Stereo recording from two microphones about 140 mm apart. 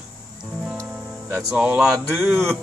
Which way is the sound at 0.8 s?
10° right (ahead or behind).